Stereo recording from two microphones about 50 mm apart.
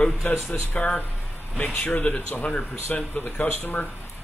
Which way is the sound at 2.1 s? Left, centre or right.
Left.